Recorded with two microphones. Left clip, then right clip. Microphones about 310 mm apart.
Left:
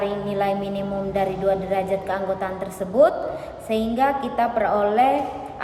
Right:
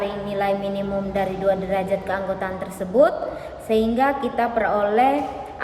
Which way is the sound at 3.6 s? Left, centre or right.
Centre.